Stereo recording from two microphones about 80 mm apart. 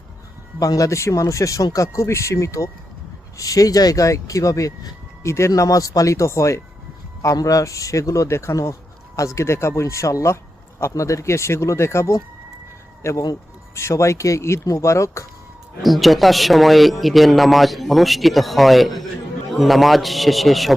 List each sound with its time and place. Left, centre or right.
0.6 s speech: left
15.8 s speech: centre